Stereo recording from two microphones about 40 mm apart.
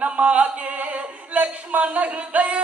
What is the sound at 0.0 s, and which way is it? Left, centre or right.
Music, right.